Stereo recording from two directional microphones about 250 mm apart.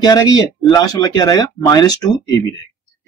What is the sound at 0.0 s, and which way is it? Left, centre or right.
Speech, centre.